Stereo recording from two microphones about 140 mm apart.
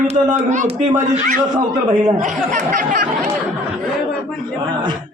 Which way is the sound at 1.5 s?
30° right (ahead or behind).